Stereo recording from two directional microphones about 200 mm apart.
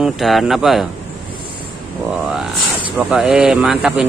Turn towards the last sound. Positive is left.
turn(degrees=-5)  # may be behind; listen again after turning